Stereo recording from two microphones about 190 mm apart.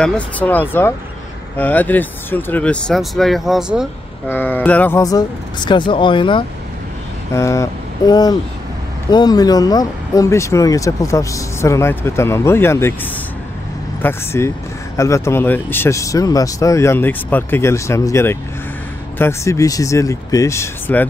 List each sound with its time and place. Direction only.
0.0 s speech: 10° left (ahead or behind)
4.3 s speech: 10° left (ahead or behind); by 6.4 s 25° left (ahead or behind)
7.3 s speech: 15° left (ahead or behind)